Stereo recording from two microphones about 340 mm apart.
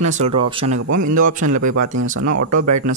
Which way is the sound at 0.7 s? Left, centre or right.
Right.